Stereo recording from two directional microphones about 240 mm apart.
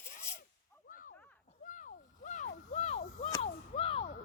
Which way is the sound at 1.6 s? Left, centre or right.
Left.